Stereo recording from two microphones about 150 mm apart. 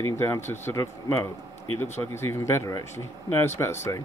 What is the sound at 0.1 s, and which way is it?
Speech, 15° left (ahead or behind).